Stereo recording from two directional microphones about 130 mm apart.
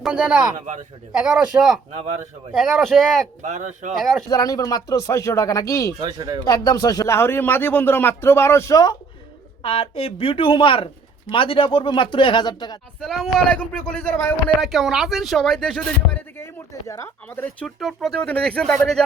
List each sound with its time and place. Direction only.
0.0 s speech: 10° right (ahead or behind)
0.6 s a man's voice: 70° right (ahead or behind)
1.1 s speech: 5° right (ahead or behind)
3.4 s speech: 65° right (ahead or behind)
4.3 s speech: 30° left (ahead or behind)
6.0 s speech: 35° right (ahead or behind)
6.4 s speech: 30° left (ahead or behind)
9.6 s speech: 45° left (ahead or behind)
13.0 s speech: 5° left (ahead or behind)
14.6 s speech: centre (ahead or behind)
16.4 s speech: 20° left (ahead or behind)
17.7 s speech: centre (ahead or behind)